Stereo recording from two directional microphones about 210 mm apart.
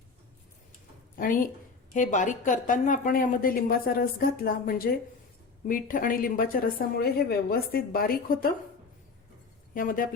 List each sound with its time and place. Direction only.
1.1 s a woman's voice: 40° left (ahead or behind)
9.7 s a woman's voice: 40° left (ahead or behind)